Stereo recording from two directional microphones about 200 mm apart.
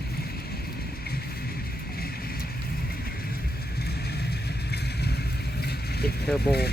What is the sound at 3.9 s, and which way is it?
Vehicle, 55° left (ahead or behind).